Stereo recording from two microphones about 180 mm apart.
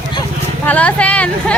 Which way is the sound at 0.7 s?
10° left (ahead or behind).